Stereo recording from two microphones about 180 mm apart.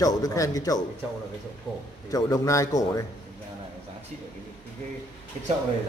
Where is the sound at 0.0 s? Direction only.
20° left (ahead or behind).